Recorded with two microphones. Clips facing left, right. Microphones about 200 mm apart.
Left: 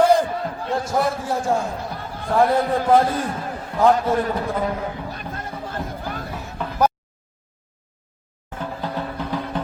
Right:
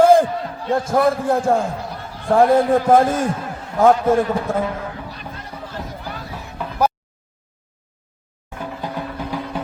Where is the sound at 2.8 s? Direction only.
45° right (ahead or behind).